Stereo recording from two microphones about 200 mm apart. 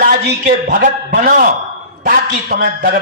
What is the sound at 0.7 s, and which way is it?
A man's voice, 45° right (ahead or behind).